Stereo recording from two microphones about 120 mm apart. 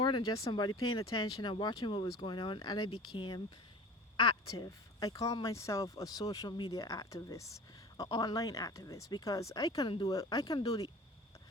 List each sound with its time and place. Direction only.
0.0 s speech: 40° left (ahead or behind)
4.4 s speech: 30° left (ahead or behind)